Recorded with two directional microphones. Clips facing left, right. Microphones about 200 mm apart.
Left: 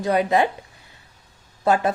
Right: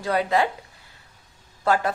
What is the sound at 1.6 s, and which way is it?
Speech, 20° left (ahead or behind).